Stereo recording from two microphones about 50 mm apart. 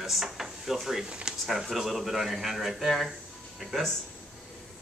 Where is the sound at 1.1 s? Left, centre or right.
Centre.